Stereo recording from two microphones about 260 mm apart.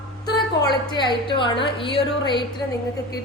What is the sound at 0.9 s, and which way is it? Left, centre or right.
A woman's voice, centre.